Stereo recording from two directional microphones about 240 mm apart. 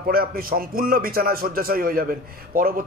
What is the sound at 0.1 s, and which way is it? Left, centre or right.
A man's voice, right.